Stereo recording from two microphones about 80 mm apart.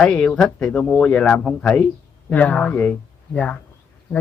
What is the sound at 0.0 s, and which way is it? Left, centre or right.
Speech, centre.